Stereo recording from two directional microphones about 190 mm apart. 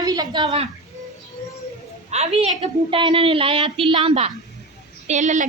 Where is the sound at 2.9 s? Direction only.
25° right (ahead or behind).